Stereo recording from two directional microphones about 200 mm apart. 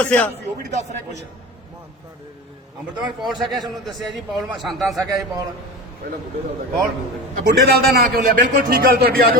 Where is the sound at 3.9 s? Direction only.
Centre (ahead or behind).